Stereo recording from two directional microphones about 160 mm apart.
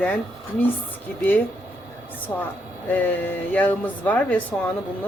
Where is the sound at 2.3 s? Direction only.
25° left (ahead or behind).